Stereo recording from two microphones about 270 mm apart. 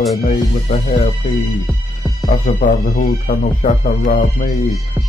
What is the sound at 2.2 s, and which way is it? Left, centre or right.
Speech, left.